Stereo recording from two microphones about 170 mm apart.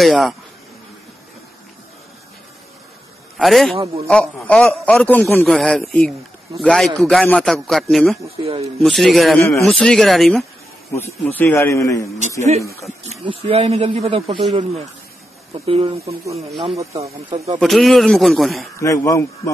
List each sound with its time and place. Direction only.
0.0 s a man's voice: centre (ahead or behind)
3.3 s a man's voice: centre (ahead or behind)
3.7 s speech: 35° right (ahead or behind)
4.1 s a man's voice: 5° left (ahead or behind)
8.4 s speech: 35° right (ahead or behind)
8.7 s a man's voice: centre (ahead or behind)
9.4 s a man's voice: 15° left (ahead or behind)
9.7 s a man's voice: 5° left (ahead or behind)
10.9 s a man's voice: 10° left (ahead or behind)
13.0 s speech: 35° right (ahead or behind)
17.6 s a man's voice: centre (ahead or behind)
18.8 s a man's voice: 20° left (ahead or behind)